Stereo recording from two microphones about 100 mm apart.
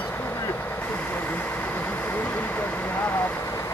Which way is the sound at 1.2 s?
20° left (ahead or behind).